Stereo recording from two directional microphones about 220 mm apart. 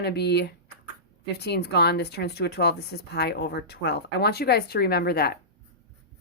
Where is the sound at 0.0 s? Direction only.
50° left (ahead or behind).